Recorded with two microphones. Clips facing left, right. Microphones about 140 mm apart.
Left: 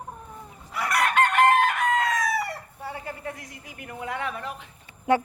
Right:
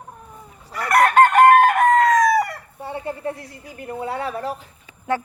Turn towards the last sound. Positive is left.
turn(degrees=15)  # may be behind; listen again after turning